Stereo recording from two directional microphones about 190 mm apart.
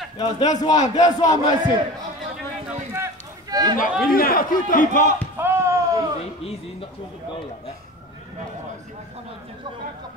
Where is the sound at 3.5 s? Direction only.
20° right (ahead or behind).